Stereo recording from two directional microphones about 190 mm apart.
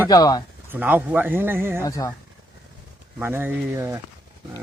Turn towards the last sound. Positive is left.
turn(degrees=-15)  # may be behind; listen again after turning